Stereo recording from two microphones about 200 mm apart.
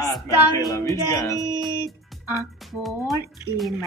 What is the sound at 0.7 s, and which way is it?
Speech, 15° left (ahead or behind).